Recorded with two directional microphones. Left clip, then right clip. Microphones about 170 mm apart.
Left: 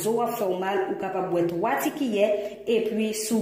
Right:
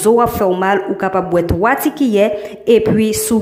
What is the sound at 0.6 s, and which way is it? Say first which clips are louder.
A woman's voice: right 11 dB; 30° right (ahead or behind).